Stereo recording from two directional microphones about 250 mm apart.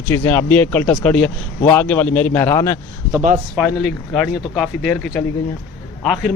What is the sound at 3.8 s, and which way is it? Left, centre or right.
Speech, centre.